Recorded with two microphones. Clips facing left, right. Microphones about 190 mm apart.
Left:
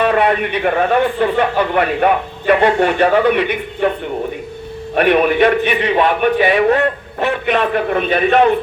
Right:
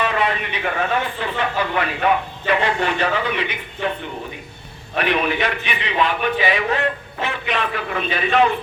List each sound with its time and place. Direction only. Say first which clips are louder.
0.0 s speech: left 7 dB; 55° left (ahead or behind)
4.9 s speech: left 8 dB; 50° left (ahead or behind)